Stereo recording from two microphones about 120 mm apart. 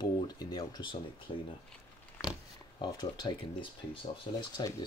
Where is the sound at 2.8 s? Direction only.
35° left (ahead or behind).